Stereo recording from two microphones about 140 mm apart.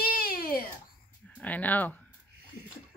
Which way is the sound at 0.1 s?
90° left.